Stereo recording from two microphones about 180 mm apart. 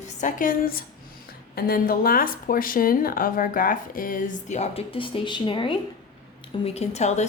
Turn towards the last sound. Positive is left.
turn(degrees=40)  # may be behind; listen again after turning